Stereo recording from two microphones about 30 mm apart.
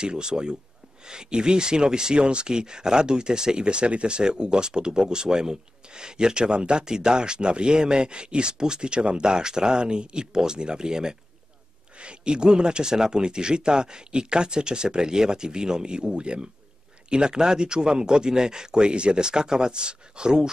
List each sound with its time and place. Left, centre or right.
0.0 s speech: right